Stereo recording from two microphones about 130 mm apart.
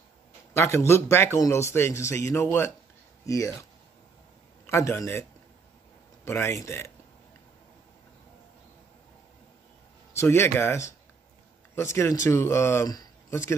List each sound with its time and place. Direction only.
0.6 s speech: 20° left (ahead or behind)
4.6 s speech: 20° left (ahead or behind)
6.2 s speech: 20° left (ahead or behind)
10.1 s speech: 20° left (ahead or behind)